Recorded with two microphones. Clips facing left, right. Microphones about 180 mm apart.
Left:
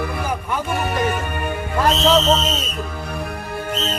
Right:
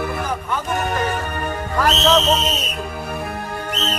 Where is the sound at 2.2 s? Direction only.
15° right (ahead or behind).